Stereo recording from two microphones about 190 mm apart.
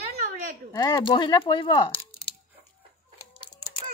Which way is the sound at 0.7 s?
20° left (ahead or behind).